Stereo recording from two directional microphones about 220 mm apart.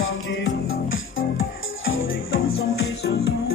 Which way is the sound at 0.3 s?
65° left (ahead or behind).